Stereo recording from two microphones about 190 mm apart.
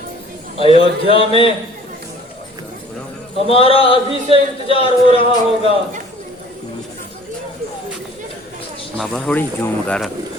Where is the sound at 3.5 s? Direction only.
30° left (ahead or behind).